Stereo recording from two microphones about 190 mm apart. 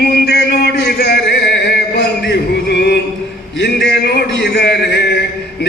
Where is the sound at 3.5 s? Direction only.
60° left (ahead or behind).